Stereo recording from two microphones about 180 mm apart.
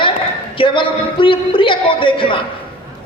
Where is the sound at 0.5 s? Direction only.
30° left (ahead or behind).